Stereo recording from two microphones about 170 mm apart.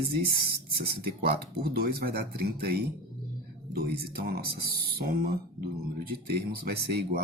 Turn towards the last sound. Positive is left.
turn(degrees=-70)  # may be behind; listen again after turning